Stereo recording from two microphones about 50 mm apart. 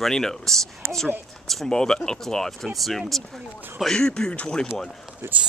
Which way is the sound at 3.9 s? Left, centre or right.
Centre.